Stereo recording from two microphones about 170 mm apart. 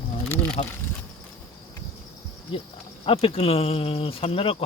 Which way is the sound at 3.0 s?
35° left (ahead or behind).